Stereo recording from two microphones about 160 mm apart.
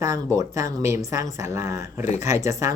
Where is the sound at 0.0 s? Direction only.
20° right (ahead or behind).